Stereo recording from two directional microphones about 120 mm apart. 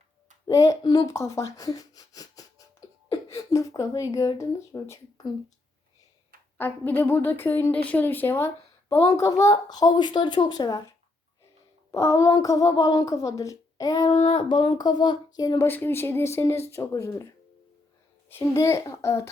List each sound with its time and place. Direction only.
0.4 s speech: 30° left (ahead or behind)
6.6 s a woman's voice: 15° left (ahead or behind)
14.1 s a woman's voice: 55° left (ahead or behind); by 15.6 s 30° left (ahead or behind)
15.6 s speech: 20° left (ahead or behind)